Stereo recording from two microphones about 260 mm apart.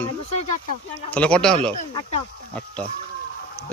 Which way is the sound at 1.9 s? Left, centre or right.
Left.